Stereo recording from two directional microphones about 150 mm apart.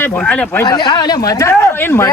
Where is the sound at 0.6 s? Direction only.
30° left (ahead or behind).